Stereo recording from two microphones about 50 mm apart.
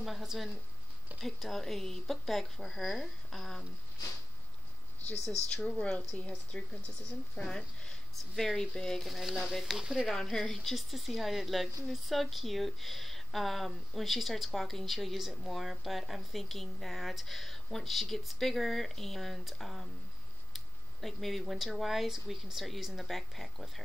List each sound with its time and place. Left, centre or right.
0.0 s speech: centre
5.5 s speech: centre
9.6 s speech: centre
10.3 s speech: centre